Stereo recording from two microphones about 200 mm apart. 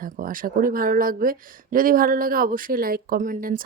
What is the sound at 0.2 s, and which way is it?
Speech, 45° right (ahead or behind).